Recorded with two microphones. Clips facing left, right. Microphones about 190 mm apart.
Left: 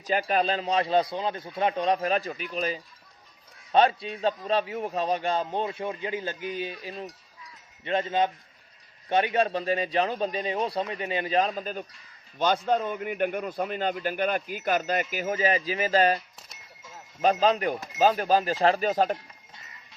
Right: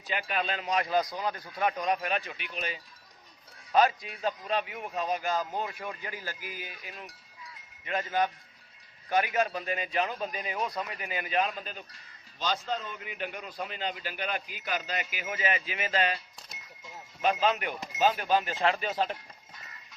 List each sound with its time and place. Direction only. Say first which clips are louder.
0.1 s a man's voice: left 7 dB; 40° left (ahead or behind)